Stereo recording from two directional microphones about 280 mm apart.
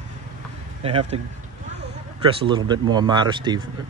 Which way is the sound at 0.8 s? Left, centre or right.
Right.